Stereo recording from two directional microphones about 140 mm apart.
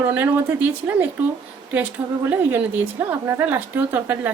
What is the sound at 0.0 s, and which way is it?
Speech, 15° right (ahead or behind).